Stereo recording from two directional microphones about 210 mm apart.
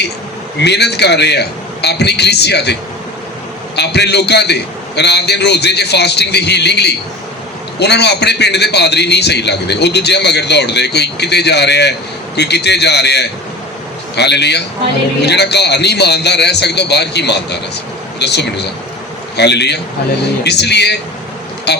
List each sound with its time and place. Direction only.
0.6 s a man's voice: 50° left (ahead or behind)
3.8 s a man's voice: 55° left (ahead or behind)